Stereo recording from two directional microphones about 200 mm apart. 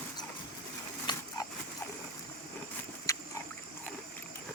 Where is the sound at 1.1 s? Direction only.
20° left (ahead or behind).